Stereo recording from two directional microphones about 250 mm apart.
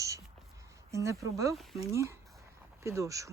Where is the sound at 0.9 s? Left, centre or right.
Centre.